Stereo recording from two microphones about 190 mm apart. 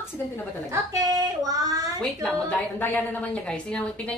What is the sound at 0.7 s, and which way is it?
A woman's voice, 20° right (ahead or behind).